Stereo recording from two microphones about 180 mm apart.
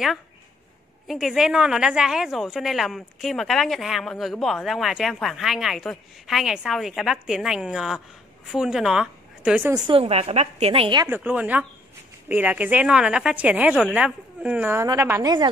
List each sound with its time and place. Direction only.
1.0 s a woman's voice: centre (ahead or behind)
9.8 s a woman's voice: 35° right (ahead or behind)
11.1 s a woman's voice: 10° right (ahead or behind)